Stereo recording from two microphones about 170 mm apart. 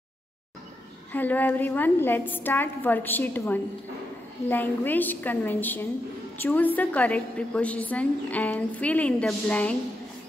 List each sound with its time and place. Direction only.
1.1 s a woman's voice: 10° left (ahead or behind)